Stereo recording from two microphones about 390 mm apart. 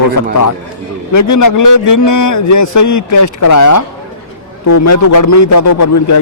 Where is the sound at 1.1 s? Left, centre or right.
Left.